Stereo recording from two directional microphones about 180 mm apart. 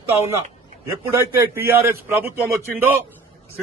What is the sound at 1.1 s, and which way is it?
A man's voice, 15° right (ahead or behind).